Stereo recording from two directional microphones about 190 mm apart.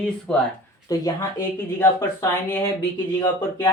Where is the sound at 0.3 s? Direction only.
5° left (ahead or behind).